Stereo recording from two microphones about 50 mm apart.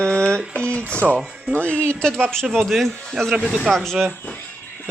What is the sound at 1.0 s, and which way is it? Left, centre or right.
Speech, centre.